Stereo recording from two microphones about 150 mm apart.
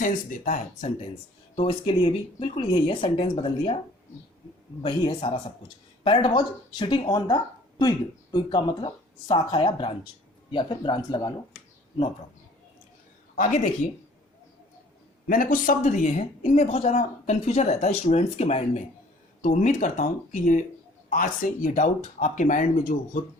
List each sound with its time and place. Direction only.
0.0 s speech: 65° left (ahead or behind)
1.5 s speech: 35° left (ahead or behind)
4.8 s speech: 35° left (ahead or behind)
13.3 s speech: 60° left (ahead or behind)
15.3 s a woman's voice: 65° left (ahead or behind)